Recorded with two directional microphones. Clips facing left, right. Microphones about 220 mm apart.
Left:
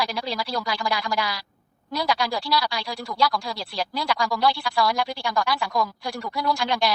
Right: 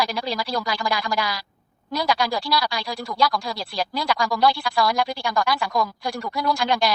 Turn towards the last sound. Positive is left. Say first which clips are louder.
# right 2 dB
turn(degrees=-45)  # may be behind; listen again after turning